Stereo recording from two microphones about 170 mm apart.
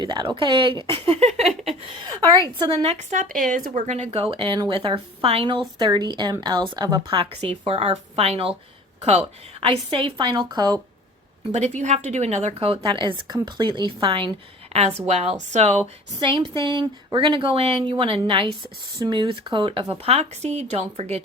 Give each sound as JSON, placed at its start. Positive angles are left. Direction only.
{"t": 0.0, "sound": "a woman's voice", "side_deg": -25}
{"t": 2.8, "sound": "a woman's voice", "side_deg": -40}
{"t": 11.5, "sound": "a woman's voice", "side_deg": -40}